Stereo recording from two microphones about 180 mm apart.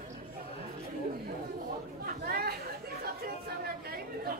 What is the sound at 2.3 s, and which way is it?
Chatter, 55° right (ahead or behind).